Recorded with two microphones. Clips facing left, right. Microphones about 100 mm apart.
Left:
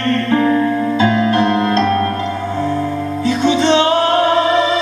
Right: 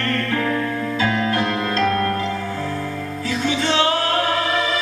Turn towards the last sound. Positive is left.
turn(degrees=25)  # may be behind; listen again after turning